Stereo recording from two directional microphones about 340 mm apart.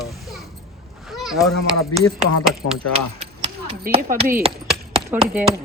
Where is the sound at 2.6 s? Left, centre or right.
Left.